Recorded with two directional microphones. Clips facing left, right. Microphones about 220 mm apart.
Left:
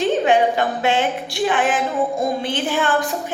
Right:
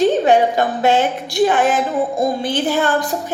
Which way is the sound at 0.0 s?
40° right (ahead or behind).